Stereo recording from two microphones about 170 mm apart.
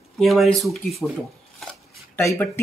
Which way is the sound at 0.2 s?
Centre (ahead or behind).